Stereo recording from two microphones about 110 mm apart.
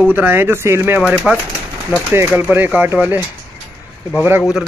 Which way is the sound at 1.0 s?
10° right (ahead or behind).